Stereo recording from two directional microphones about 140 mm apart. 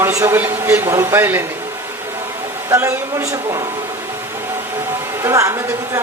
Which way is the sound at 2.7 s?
20° right (ahead or behind).